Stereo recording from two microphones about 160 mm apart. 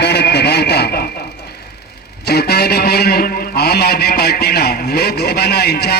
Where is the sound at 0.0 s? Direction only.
90° left.